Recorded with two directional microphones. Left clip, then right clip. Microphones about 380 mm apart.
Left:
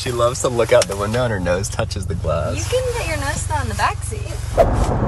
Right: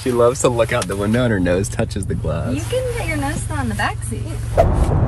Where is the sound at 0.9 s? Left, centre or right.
Left.